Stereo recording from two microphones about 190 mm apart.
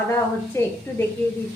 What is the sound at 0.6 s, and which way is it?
Speech, 15° left (ahead or behind).